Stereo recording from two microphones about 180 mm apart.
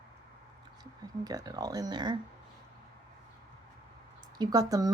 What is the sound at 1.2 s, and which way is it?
Speech, 20° right (ahead or behind).